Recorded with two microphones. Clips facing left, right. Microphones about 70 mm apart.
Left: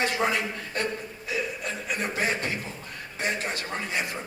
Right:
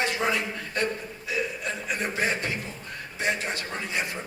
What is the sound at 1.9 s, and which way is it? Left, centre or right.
A man's voice, left.